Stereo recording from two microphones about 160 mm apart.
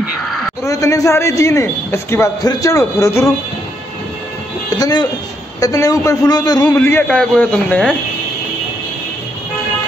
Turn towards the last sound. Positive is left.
turn(degrees=5)  # may be behind; listen again after turning